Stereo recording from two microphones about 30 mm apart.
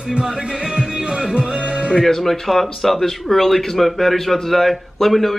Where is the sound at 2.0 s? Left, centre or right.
Centre.